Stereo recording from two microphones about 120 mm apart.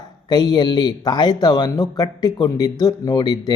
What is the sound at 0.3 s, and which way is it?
A man's voice, 35° left (ahead or behind).